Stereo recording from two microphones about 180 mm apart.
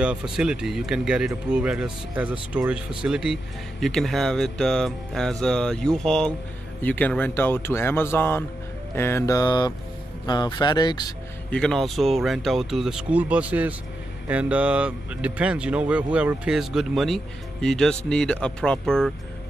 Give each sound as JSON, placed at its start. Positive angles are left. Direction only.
{"t": 0.0, "sound": "speech", "side_deg": -5}
{"t": 11.5, "sound": "speech", "side_deg": 5}